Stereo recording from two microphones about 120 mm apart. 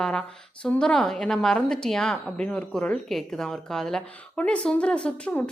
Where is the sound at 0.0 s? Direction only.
5° left (ahead or behind).